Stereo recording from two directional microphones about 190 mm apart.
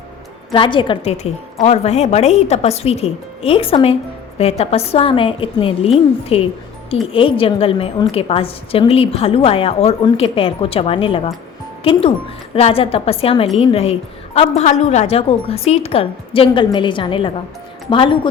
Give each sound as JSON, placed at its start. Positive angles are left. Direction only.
{"t": 0.5, "sound": "a woman's voice", "side_deg": 25}